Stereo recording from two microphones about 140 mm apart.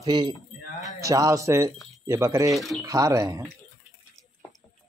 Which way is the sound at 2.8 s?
20° right (ahead or behind).